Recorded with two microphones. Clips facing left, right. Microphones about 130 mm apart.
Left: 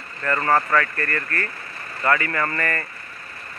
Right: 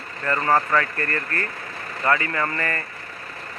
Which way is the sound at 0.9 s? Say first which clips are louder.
Even; 25° right (ahead or behind).